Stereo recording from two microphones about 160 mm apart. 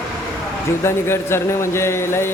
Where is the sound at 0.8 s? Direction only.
15° left (ahead or behind).